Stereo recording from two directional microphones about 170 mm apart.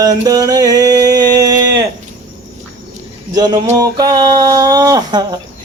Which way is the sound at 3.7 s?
20° right (ahead or behind).